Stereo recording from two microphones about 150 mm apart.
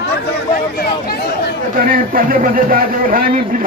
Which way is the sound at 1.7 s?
70° right (ahead or behind).